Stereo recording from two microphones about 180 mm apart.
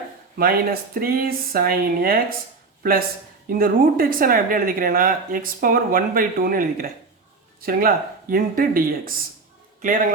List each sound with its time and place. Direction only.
0.3 s speech: 55° right (ahead or behind)
3.5 s speech: 55° right (ahead or behind)